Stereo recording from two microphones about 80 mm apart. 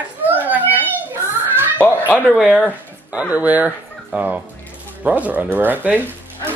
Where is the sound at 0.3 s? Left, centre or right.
Right.